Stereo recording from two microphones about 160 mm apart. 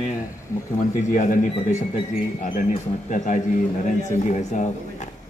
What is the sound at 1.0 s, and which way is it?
Speech, 50° left (ahead or behind).